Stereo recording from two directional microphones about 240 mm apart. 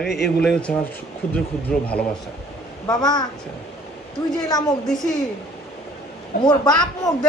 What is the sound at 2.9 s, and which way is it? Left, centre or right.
Speech, centre.